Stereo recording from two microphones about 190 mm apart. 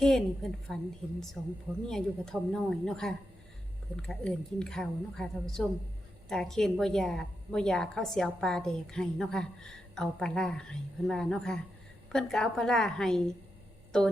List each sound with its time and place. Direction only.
0.0 s a woman's voice: centre (ahead or behind)